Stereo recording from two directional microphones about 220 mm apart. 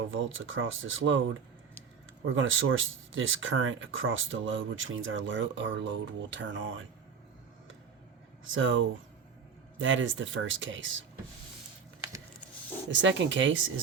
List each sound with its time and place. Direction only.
0.1 s speech: 60° right (ahead or behind)
8.4 s speech: 60° right (ahead or behind)
12.9 s speech: 55° right (ahead or behind)